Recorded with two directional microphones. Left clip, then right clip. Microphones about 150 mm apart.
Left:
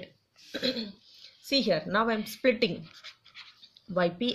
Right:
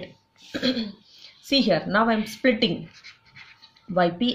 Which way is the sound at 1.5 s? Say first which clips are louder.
Right 5 dB; 35° left (ahead or behind).